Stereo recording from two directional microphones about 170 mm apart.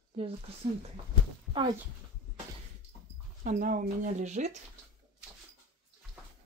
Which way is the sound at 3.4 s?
50° right (ahead or behind).